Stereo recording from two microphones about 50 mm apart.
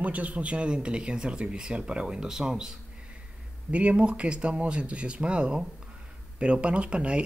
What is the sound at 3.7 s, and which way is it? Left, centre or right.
Speech, right.